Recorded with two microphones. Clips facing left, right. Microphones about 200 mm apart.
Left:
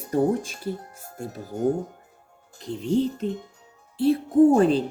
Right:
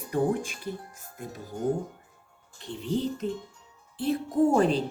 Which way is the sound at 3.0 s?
35° left (ahead or behind).